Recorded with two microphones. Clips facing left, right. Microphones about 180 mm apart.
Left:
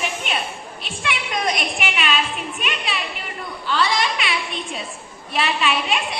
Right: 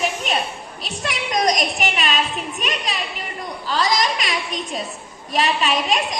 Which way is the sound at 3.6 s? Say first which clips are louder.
Right 1 dB; 40° right (ahead or behind).